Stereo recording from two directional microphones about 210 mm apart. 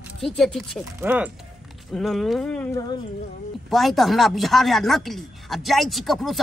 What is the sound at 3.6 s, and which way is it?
Speech, centre (ahead or behind).